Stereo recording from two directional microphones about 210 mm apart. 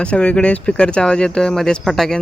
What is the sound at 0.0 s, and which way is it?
Speech, 5° left (ahead or behind).